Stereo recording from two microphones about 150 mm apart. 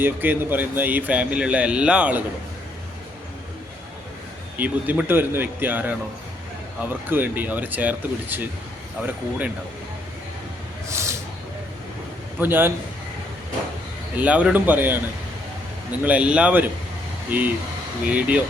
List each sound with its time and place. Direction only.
0.0 s speech: 15° right (ahead or behind)
4.5 s speech: 10° right (ahead or behind)
10.8 s snake: 20° right (ahead or behind)
12.4 s speech: 15° right (ahead or behind)
14.2 s speech: 10° right (ahead or behind)
16.0 s speech: 10° right (ahead or behind)
18.1 s speech: 10° right (ahead or behind)